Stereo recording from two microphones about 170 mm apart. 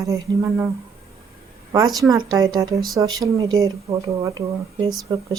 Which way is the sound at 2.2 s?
20° right (ahead or behind).